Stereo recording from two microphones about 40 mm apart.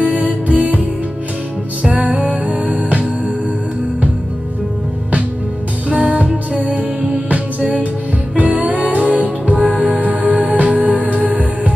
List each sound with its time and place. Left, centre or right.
0.0 s music: right
5.9 s music: right